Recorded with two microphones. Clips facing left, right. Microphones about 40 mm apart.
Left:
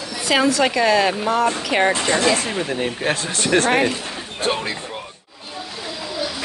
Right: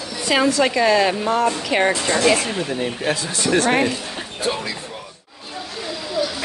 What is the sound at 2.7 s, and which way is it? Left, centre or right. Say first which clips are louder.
Speech: left 1 dB; left.